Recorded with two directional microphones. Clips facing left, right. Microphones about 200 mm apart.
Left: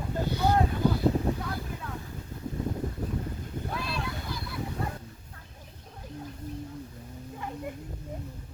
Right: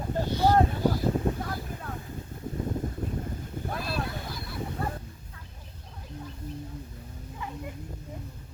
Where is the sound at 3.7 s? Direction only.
50° right (ahead or behind).